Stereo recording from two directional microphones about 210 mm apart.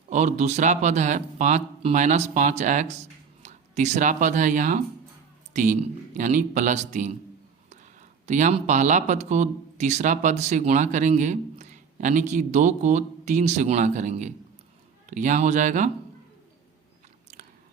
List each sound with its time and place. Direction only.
0.1 s speech: 35° right (ahead or behind)
8.3 s speech: 35° right (ahead or behind)
17.3 s chewing: 35° right (ahead or behind)